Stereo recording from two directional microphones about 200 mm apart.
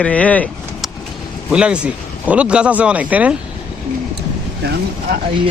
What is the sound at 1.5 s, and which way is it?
Speech, 5° right (ahead or behind).